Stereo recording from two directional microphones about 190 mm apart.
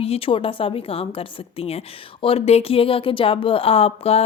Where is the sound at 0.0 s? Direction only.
30° left (ahead or behind).